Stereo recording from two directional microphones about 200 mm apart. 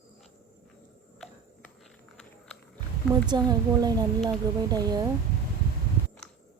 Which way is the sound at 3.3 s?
20° right (ahead or behind).